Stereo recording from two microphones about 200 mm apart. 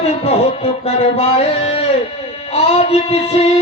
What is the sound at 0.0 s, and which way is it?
Music, 30° left (ahead or behind).